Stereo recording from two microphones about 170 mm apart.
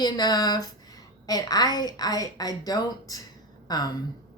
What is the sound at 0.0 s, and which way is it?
Speech, 25° left (ahead or behind).